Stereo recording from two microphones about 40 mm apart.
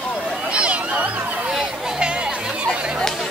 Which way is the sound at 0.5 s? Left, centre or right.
Right.